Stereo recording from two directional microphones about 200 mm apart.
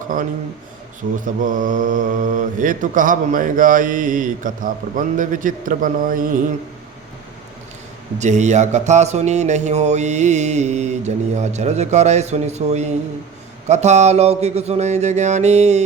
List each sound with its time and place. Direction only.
1.2 s mantra: 40° right (ahead or behind)
8.2 s mantra: 35° right (ahead or behind)